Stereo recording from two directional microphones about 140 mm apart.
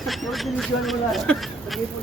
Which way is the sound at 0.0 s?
Centre (ahead or behind).